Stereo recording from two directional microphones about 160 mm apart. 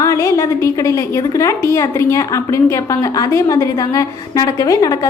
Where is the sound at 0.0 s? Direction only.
20° left (ahead or behind).